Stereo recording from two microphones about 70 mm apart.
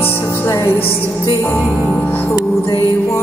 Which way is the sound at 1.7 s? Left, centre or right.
Centre.